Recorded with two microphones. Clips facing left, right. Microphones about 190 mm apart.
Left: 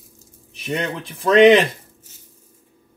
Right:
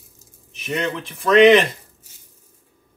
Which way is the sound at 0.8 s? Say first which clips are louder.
Right 4 dB; 30° left (ahead or behind).